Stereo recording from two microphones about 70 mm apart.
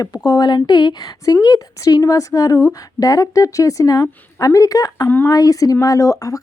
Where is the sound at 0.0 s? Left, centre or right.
Left.